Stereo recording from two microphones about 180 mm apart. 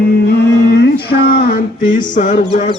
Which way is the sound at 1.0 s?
60° left (ahead or behind).